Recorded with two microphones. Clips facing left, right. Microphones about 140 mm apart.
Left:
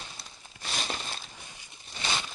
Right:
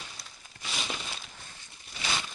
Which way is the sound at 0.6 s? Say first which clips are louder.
Left 2 dB; 45° left (ahead or behind).